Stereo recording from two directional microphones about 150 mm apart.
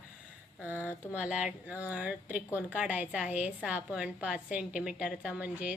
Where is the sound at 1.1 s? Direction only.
5° right (ahead or behind).